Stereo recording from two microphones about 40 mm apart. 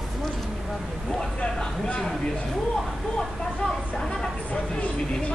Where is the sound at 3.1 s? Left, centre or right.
Centre.